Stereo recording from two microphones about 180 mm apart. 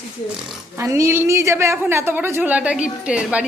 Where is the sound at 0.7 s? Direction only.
15° right (ahead or behind).